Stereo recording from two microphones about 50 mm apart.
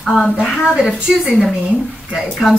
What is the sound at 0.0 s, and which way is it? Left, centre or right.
Speech, centre.